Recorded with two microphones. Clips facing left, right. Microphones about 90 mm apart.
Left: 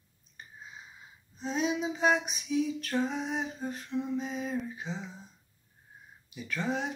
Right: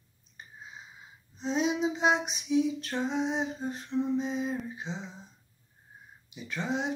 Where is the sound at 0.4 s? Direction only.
20° right (ahead or behind).